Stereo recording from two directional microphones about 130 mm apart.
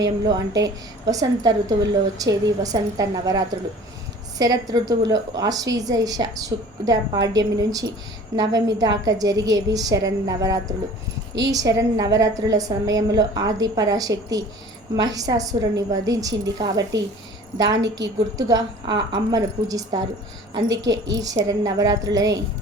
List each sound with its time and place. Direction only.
0.0 s a woman's voice: 30° right (ahead or behind)